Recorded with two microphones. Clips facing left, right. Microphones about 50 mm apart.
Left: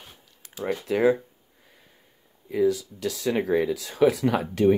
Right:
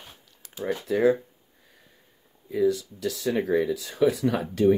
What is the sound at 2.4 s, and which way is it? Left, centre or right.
Speech, left.